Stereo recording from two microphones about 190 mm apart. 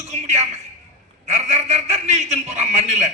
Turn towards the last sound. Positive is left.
turn(degrees=-35)  # may be behind; listen again after turning